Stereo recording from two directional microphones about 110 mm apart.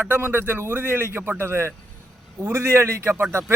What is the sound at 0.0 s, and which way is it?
A man's voice, 15° right (ahead or behind).